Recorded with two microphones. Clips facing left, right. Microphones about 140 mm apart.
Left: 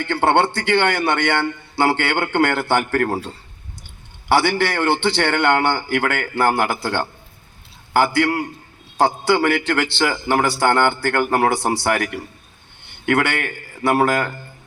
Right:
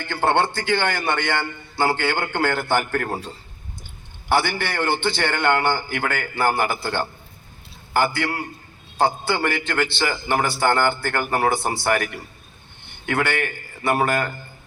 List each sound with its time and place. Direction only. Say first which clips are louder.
0.0 s a man's voice: left 3 dB; 70° left (ahead or behind)
4.3 s a man's voice: left 4 dB; 70° left (ahead or behind)